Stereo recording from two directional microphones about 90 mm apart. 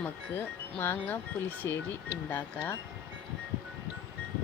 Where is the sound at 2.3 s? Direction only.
20° left (ahead or behind).